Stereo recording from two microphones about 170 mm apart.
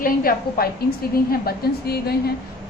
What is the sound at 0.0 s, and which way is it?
A woman's voice, 60° left (ahead or behind).